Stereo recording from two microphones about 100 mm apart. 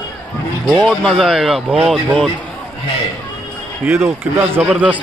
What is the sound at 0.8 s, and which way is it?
Speech, centre (ahead or behind).